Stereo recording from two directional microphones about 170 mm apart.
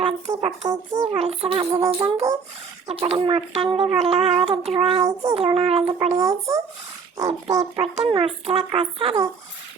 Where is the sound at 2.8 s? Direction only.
35° right (ahead or behind).